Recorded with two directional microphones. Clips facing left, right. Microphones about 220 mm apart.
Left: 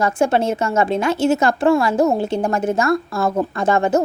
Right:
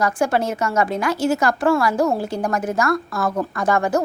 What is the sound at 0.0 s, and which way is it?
A woman's voice, 25° left (ahead or behind).